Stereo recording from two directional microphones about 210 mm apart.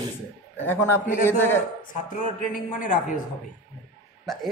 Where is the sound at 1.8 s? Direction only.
40° left (ahead or behind).